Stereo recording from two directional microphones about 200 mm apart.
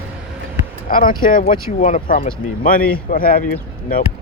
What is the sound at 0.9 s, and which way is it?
Speech, 45° left (ahead or behind).